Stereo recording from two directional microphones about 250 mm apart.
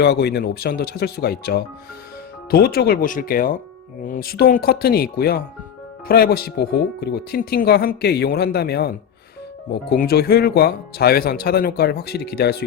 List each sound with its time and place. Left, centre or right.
0.0 s speech: left